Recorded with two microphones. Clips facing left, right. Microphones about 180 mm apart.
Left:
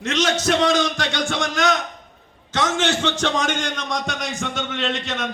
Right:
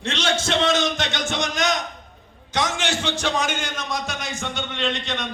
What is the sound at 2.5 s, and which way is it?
A man's voice, 15° right (ahead or behind).